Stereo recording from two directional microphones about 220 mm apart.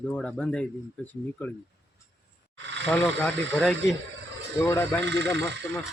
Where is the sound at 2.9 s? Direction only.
5° left (ahead or behind).